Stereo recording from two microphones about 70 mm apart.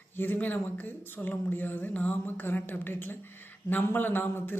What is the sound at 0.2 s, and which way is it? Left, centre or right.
Speech, left.